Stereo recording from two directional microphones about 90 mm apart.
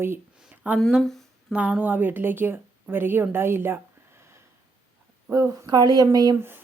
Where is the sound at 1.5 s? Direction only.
10° right (ahead or behind).